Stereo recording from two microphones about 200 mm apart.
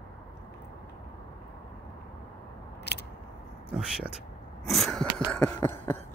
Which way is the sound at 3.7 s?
5° right (ahead or behind).